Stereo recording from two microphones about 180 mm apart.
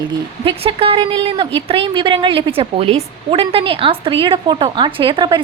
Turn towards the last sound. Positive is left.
turn(degrees=-25)  # may be behind; listen again after turning